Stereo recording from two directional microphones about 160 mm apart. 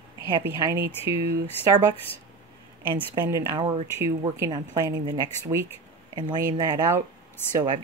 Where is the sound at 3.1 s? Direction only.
20° right (ahead or behind).